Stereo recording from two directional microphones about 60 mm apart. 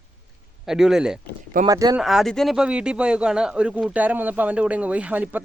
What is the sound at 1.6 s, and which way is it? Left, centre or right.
Speech, right.